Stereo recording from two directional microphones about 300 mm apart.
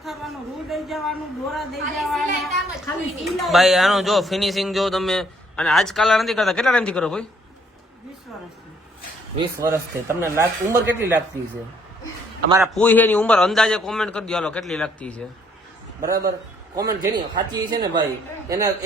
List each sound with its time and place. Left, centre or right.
0.0 s speech: centre
3.2 s speech: centre
9.6 s speech: centre
12.5 s speech: centre
12.7 s speech: centre
16.0 s a man's voice: right
16.7 s a man's voice: centre